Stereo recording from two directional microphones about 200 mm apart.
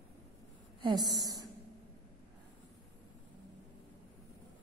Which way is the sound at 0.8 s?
20° right (ahead or behind).